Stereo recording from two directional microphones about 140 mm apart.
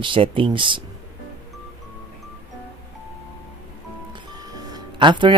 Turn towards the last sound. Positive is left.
turn(degrees=-35)  # may be behind; listen again after turning